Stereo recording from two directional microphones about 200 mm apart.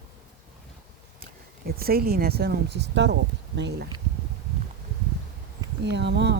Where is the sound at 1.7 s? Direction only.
50° right (ahead or behind).